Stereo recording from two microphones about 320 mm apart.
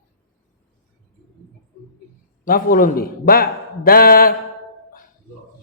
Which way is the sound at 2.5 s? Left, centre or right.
Left.